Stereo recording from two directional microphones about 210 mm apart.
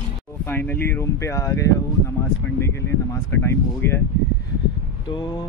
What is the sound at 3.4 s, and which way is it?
Speech, 10° left (ahead or behind).